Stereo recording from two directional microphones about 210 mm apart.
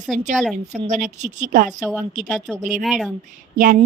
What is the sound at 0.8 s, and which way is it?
Speech, 35° right (ahead or behind).